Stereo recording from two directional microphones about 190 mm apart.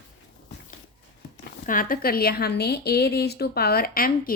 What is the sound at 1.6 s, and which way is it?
A woman's voice, 45° left (ahead or behind).